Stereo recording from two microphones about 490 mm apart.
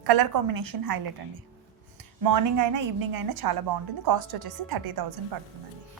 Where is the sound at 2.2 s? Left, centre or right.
Right.